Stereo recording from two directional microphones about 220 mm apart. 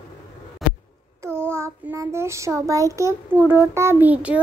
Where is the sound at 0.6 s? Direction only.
Centre (ahead or behind).